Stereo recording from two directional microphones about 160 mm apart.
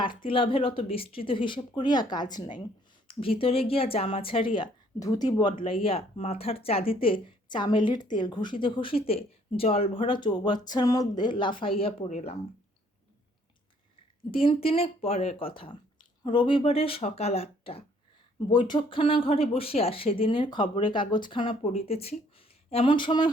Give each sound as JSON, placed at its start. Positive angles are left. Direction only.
{"t": 0.3, "sound": "speech", "side_deg": 35}
{"t": 14.3, "sound": "speech", "side_deg": 35}